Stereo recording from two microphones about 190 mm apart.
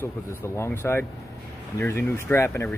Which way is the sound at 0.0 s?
10° left (ahead or behind).